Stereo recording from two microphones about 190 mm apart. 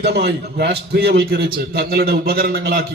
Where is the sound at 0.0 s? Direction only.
60° right (ahead or behind).